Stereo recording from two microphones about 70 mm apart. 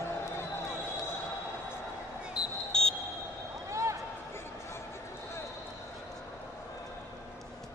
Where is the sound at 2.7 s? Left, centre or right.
Centre.